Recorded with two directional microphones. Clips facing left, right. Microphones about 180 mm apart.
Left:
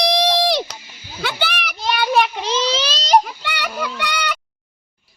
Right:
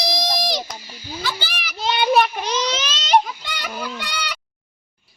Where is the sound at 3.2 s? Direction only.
70° left (ahead or behind).